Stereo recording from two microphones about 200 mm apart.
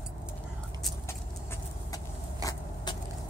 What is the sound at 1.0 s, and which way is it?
Vehicle, 15° left (ahead or behind).